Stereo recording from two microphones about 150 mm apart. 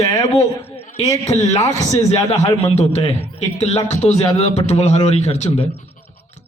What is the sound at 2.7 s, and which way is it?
A man's voice, 45° left (ahead or behind).